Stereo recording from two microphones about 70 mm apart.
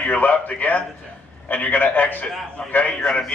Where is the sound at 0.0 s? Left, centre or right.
Left.